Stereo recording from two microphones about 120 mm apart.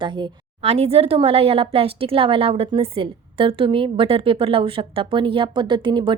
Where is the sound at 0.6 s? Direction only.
55° right (ahead or behind).